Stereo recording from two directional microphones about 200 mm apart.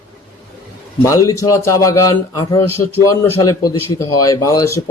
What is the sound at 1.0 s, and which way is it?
A man's voice, 15° left (ahead or behind).